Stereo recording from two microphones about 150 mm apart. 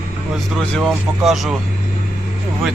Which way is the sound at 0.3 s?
Centre (ahead or behind).